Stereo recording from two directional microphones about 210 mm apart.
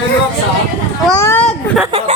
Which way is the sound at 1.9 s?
25° right (ahead or behind).